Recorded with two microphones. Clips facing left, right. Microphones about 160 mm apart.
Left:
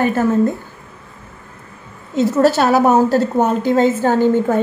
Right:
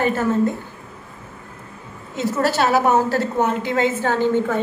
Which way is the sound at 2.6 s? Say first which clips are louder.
Left 4 dB; 40° left (ahead or behind).